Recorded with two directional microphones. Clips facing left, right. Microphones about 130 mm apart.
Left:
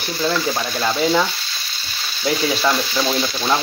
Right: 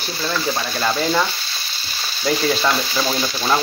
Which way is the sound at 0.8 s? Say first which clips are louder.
Left 2 dB; centre (ahead or behind).